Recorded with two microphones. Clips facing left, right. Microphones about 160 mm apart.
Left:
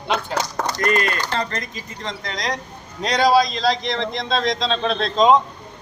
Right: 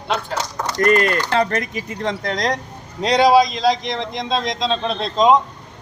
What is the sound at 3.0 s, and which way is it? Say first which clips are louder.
A man's voice: right 3 dB; 25° right (ahead or behind).